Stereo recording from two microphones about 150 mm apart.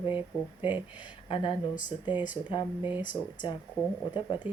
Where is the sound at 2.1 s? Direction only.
10° right (ahead or behind).